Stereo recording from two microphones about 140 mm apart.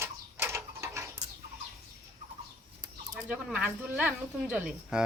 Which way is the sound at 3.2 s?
10° right (ahead or behind).